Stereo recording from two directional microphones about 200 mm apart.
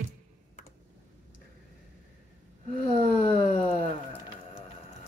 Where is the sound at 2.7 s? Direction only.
50° right (ahead or behind).